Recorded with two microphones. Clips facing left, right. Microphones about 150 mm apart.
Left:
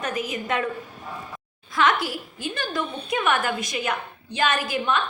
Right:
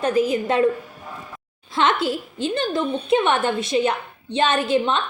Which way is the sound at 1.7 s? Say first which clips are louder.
Right 2 dB; 25° right (ahead or behind).